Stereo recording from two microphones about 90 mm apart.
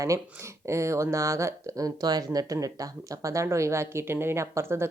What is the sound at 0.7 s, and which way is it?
Speech, 35° right (ahead or behind).